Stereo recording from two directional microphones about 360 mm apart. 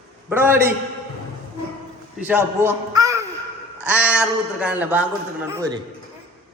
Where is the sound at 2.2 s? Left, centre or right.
Centre.